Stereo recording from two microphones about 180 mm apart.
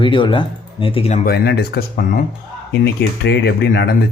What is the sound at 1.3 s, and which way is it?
Speech, 65° left (ahead or behind).